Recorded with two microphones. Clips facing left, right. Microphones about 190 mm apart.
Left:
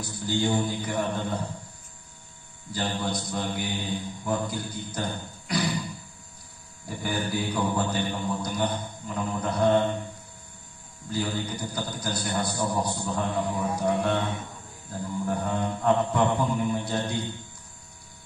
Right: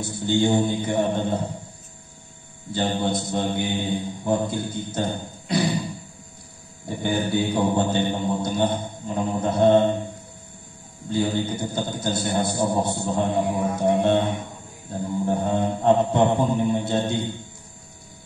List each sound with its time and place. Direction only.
0.0 s a man's voice: 25° right (ahead or behind)
2.7 s a man's voice: 25° right (ahead or behind)
6.9 s a man's voice: 25° right (ahead or behind)
11.1 s a man's voice: 25° right (ahead or behind)